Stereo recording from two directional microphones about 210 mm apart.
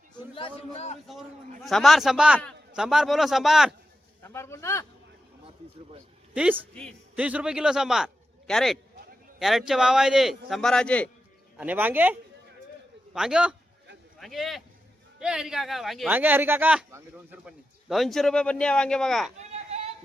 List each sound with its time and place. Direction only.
0.3 s a man's voice: 30° left (ahead or behind)
1.6 s speech: centre (ahead or behind)
4.2 s a man's voice: 10° left (ahead or behind)
6.3 s a woman's voice: 5° right (ahead or behind)
11.5 s speech: 5° right (ahead or behind)
13.1 s speech: 5° right (ahead or behind)
19.4 s a sound: 30° right (ahead or behind)